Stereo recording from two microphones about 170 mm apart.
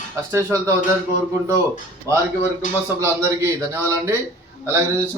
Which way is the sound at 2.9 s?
15° right (ahead or behind).